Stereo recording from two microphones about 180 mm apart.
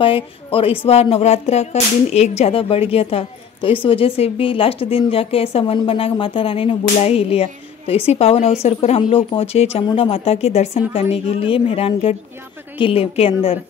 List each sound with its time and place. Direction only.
0.0 s speech: 30° left (ahead or behind)